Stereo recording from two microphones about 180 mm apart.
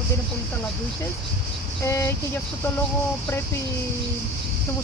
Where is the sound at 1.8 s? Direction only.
15° left (ahead or behind).